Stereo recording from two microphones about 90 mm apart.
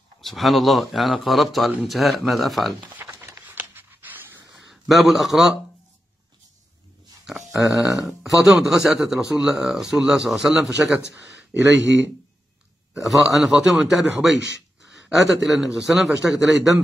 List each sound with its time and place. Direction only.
0.2 s speech: centre (ahead or behind)
3.0 s a sound: 30° right (ahead or behind)
4.8 s speech: centre (ahead or behind)
7.2 s a sound: centre (ahead or behind)
8.2 s speech: 5° right (ahead or behind)
13.0 s speech: centre (ahead or behind)